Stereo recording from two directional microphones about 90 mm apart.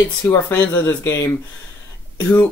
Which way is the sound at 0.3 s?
25° left (ahead or behind).